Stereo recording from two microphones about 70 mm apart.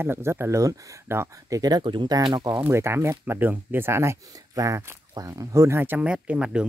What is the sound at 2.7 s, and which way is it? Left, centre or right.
Speech, right.